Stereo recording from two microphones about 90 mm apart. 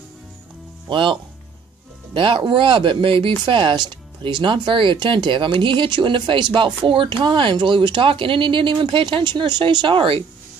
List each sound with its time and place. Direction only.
0.8 s speech: 65° right (ahead or behind)
2.1 s speech: 70° right (ahead or behind)